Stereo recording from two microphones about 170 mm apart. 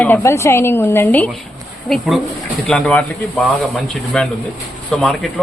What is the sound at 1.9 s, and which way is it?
A woman's voice, centre (ahead or behind).